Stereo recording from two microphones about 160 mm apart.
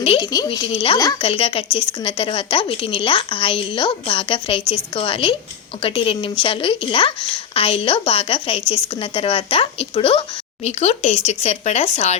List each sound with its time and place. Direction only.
0.0 s a woman's voice: 30° left (ahead or behind)